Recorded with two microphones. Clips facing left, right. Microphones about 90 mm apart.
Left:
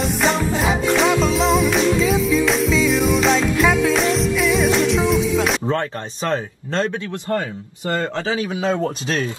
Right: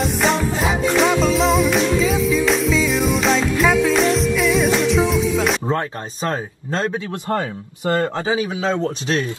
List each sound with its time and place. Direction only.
0.0 s music: centre (ahead or behind)
6.3 s speech: 10° right (ahead or behind)
7.1 s speech: 30° right (ahead or behind)